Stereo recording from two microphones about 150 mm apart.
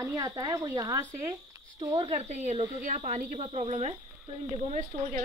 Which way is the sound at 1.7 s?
35° right (ahead or behind).